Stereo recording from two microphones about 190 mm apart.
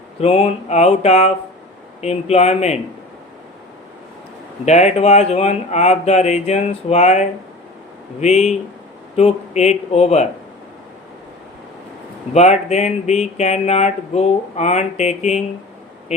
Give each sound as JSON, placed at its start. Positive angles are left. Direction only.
{"t": 0.2, "sound": "speech", "side_deg": 30}
{"t": 4.6, "sound": "speech", "side_deg": 35}
{"t": 12.3, "sound": "speech", "side_deg": 35}